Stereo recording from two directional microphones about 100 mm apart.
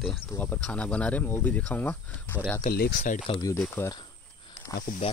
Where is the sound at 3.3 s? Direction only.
65° left (ahead or behind).